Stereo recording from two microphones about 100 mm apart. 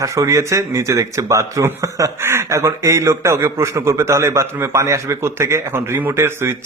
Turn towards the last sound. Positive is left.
turn(degrees=-25)  # may be behind; listen again after turning